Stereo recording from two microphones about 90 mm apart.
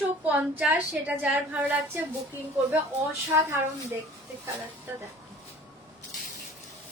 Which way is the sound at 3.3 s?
30° right (ahead or behind).